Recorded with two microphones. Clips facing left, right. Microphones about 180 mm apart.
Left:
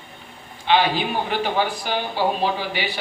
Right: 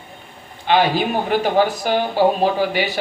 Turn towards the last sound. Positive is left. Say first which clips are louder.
# right 7 dB
turn(degrees=-45)  # may be behind; listen again after turning